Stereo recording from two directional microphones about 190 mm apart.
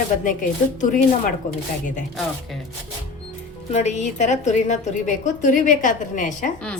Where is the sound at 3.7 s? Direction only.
35° left (ahead or behind).